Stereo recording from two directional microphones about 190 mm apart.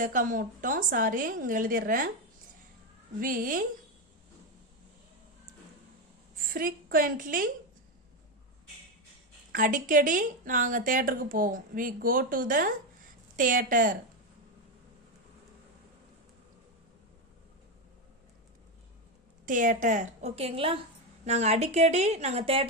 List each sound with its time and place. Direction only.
0.0 s speech: 45° right (ahead or behind)
3.2 s speech: 45° right (ahead or behind)
6.5 s speech: 50° right (ahead or behind)
9.5 s speech: 45° right (ahead or behind)
19.5 s a woman's voice: 45° right (ahead or behind)